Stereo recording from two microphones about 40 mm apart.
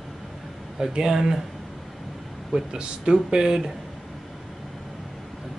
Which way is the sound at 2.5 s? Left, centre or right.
Centre.